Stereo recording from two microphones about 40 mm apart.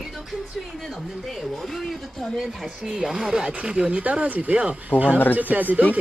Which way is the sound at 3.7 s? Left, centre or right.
Right.